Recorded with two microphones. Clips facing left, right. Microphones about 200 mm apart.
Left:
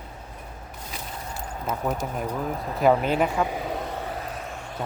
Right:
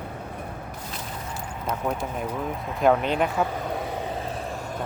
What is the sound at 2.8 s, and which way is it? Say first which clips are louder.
Speech: left 1 dB; 5° left (ahead or behind).